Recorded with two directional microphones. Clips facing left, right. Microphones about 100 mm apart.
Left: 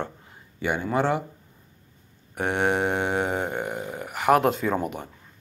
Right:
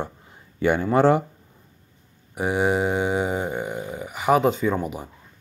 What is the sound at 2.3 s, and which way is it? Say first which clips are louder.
Mantra: right 2 dB; 5° right (ahead or behind).